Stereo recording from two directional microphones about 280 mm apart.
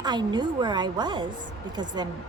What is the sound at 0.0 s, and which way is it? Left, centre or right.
A woman's voice, centre.